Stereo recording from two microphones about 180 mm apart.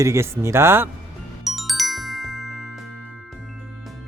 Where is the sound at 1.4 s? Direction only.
Centre (ahead or behind).